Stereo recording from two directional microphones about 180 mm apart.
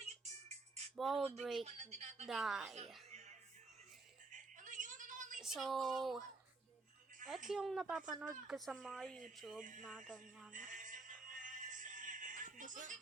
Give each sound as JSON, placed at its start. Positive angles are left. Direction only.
{"t": 0.9, "sound": "speech", "side_deg": 0}
{"t": 1.6, "sound": "speech", "side_deg": -40}
{"t": 2.2, "sound": "speech", "side_deg": 0}
{"t": 4.3, "sound": "a sound", "side_deg": -45}
{"t": 5.4, "sound": "speech", "side_deg": 0}
{"t": 7.3, "sound": "speech", "side_deg": 0}
{"t": 10.5, "sound": "music", "side_deg": -45}